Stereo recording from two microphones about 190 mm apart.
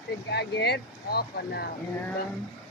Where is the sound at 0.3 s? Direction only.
60° left (ahead or behind).